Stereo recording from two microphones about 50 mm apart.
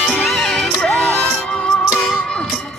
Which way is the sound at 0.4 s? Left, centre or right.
Centre.